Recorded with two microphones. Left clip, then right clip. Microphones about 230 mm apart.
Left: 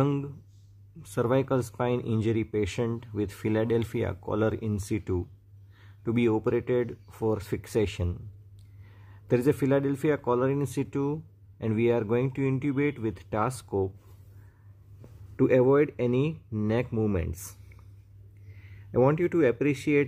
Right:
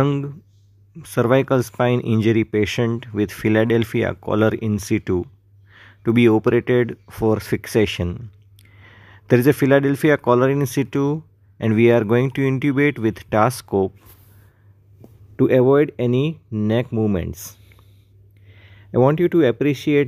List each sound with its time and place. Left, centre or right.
0.0 s speech: centre
15.3 s speech: centre